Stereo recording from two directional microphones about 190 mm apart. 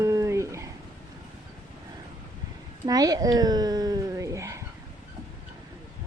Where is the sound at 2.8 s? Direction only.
20° right (ahead or behind).